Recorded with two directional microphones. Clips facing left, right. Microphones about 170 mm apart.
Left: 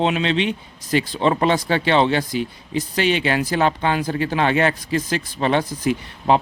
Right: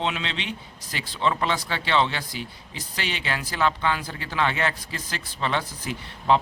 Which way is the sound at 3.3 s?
55° left (ahead or behind).